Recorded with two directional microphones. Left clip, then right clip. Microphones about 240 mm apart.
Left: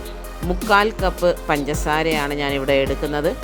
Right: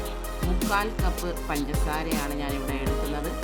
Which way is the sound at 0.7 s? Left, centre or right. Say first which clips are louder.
Left 12 dB; left.